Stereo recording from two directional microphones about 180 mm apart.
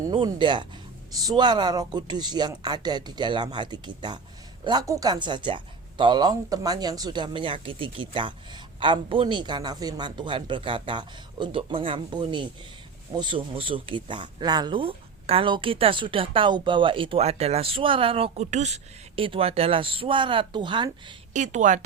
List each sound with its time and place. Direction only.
0.0 s speech: 25° right (ahead or behind)
21.3 s a woman's voice: 40° right (ahead or behind)